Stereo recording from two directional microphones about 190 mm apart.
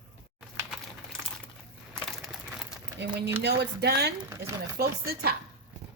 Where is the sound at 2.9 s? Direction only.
65° right (ahead or behind).